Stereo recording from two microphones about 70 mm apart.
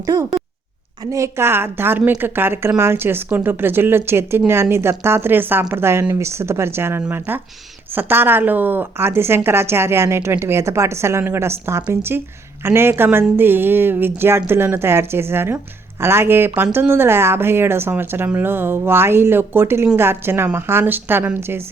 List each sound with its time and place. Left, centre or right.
1.1 s speech: right